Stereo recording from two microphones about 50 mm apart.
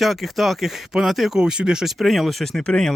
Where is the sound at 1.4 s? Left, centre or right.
Centre.